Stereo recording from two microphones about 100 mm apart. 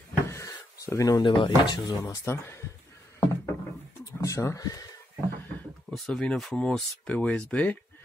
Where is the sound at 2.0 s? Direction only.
30° left (ahead or behind).